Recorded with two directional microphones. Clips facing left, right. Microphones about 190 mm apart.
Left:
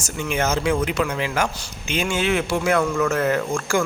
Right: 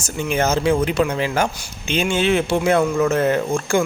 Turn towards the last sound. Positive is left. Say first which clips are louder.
# right 3 dB
turn(degrees=-20)  # may be behind; listen again after turning